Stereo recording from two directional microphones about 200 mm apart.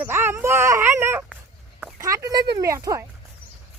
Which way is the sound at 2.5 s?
15° right (ahead or behind).